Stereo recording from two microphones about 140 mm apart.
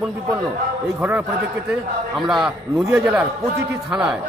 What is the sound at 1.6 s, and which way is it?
A man's voice, 5° right (ahead or behind).